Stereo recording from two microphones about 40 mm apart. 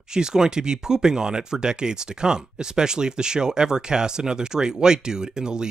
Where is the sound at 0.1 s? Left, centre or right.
Centre.